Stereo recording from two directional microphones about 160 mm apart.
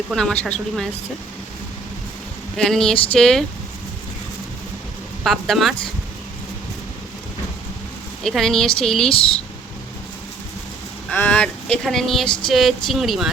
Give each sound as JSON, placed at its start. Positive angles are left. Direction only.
{"t": 0.1, "sound": "speech", "side_deg": 5}
{"t": 2.6, "sound": "speech", "side_deg": 5}
{"t": 5.2, "sound": "speech", "side_deg": 0}
{"t": 8.2, "sound": "speech", "side_deg": 0}
{"t": 9.0, "sound": "speech", "side_deg": 35}
{"t": 11.1, "sound": "speech", "side_deg": 10}